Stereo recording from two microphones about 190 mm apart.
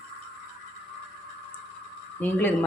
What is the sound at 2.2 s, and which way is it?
Speech, 10° left (ahead or behind).